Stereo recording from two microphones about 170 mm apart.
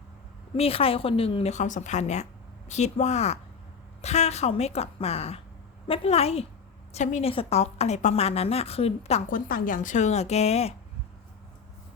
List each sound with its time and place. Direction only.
0.5 s a woman's voice: 35° left (ahead or behind)
9.3 s a woman's voice: 55° left (ahead or behind); by 10.8 s 40° left (ahead or behind)